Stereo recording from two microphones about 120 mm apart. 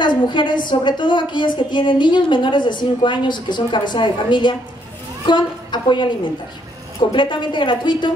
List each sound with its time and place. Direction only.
0.0 s a woman's voice: 40° left (ahead or behind)